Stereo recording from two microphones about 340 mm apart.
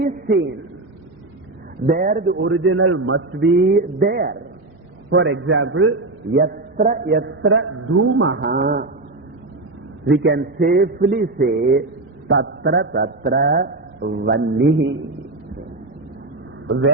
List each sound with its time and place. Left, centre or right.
0.0 s a sound: right
1.9 s a man's voice: right
10.1 s a man's voice: right
16.6 s a man's voice: right